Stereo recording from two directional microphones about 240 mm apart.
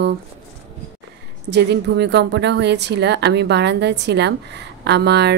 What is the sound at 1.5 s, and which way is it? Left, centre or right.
A woman's voice, right.